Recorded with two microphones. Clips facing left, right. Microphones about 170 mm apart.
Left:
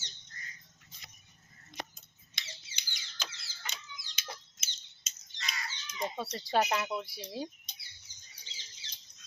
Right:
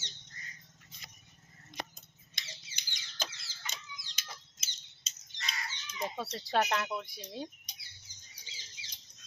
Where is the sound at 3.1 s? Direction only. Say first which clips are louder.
Right 4 dB; 50° right (ahead or behind).